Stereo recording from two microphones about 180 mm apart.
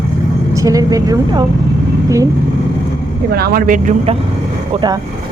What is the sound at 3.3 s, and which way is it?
Speech, 55° right (ahead or behind).